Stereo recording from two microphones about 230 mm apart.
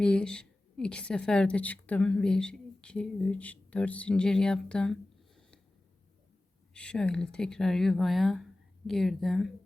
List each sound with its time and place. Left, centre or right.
0.0 s speech: centre
6.7 s speech: centre